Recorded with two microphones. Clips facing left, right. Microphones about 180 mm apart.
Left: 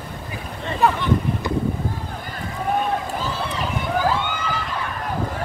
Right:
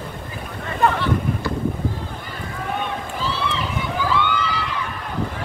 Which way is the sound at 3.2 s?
45° left (ahead or behind).